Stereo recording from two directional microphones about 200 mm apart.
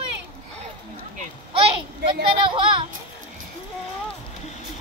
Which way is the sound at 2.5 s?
25° right (ahead or behind).